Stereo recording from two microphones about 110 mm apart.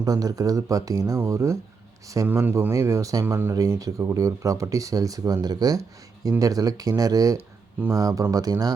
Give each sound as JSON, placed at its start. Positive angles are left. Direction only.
{"t": 0.0, "sound": "speech", "side_deg": -35}